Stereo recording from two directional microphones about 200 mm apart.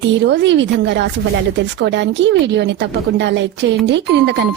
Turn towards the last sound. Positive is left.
turn(degrees=-60)  # may be behind; listen again after turning